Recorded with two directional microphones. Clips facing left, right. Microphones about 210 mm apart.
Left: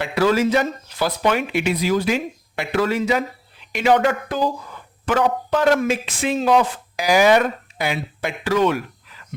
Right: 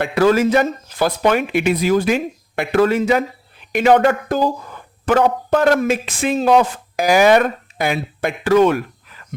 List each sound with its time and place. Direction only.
0.0 s speech: 50° right (ahead or behind)